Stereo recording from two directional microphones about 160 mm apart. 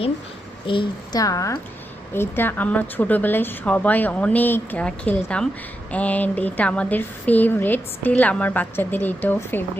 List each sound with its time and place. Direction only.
0.7 s a woman's voice: 30° left (ahead or behind); by 9.6 s 10° left (ahead or behind)